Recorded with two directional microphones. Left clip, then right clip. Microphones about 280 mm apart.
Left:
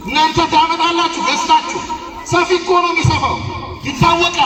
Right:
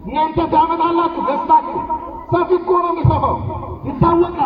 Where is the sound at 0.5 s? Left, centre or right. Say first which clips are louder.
Left 1 dB; left.